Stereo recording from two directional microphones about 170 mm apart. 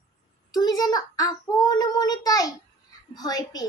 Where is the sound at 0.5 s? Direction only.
20° left (ahead or behind).